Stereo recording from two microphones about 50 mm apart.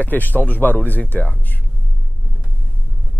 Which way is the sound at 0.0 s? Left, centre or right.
Left.